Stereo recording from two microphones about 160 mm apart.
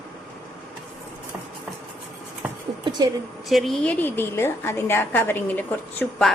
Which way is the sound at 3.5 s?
Centre (ahead or behind).